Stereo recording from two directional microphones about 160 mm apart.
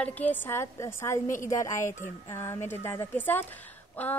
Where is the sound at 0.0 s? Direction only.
10° left (ahead or behind).